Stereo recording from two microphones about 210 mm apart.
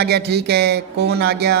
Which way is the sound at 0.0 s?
50° right (ahead or behind).